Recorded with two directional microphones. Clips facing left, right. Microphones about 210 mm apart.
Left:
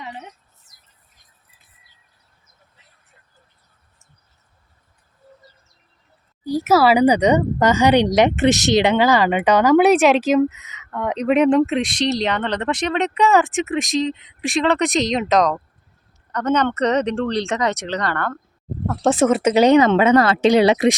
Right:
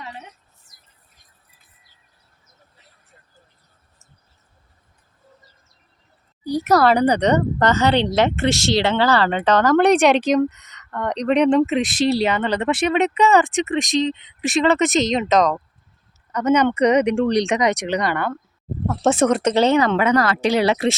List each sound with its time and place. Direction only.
6.4 s speech: centre (ahead or behind)
18.9 s speech: centre (ahead or behind); by 20.9 s 20° left (ahead or behind)